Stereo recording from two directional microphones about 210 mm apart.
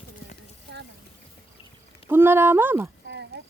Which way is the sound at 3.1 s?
55° right (ahead or behind).